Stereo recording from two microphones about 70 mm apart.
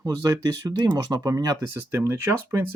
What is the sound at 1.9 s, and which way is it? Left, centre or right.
Speech, right.